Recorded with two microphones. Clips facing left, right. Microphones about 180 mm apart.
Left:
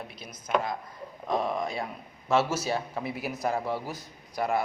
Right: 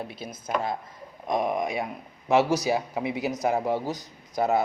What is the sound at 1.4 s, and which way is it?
A man's voice, 15° right (ahead or behind).